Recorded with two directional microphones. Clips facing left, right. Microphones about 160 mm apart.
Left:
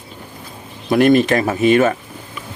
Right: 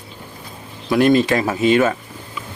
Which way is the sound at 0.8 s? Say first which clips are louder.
Left 2 dB; 50° left (ahead or behind).